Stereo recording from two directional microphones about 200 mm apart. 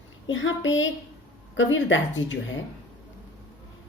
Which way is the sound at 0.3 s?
70° left (ahead or behind).